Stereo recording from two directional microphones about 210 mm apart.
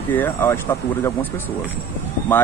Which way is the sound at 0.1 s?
10° left (ahead or behind).